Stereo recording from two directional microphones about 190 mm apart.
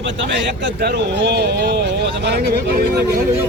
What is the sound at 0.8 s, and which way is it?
Speech, 60° right (ahead or behind).